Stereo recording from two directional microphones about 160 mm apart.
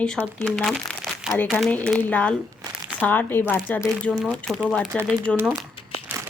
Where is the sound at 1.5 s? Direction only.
10° left (ahead or behind).